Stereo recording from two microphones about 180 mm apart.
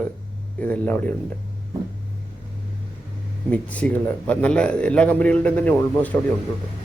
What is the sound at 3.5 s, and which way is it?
Speech, 10° left (ahead or behind).